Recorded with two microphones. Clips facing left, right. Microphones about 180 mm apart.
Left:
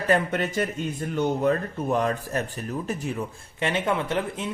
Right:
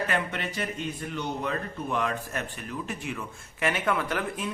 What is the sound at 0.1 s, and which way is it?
Speech, 45° left (ahead or behind).